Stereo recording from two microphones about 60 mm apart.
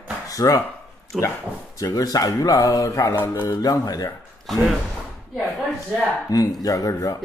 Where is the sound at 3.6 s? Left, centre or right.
Left.